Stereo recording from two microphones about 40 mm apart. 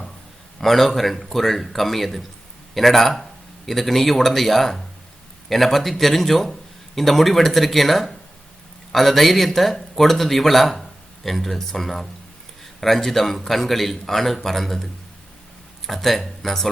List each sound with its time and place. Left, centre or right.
0.6 s a man's voice: centre
15.9 s a man's voice: centre